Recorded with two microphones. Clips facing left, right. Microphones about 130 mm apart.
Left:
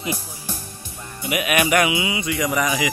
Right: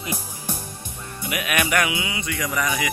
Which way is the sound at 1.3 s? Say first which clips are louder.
Left 4 dB; 15° left (ahead or behind).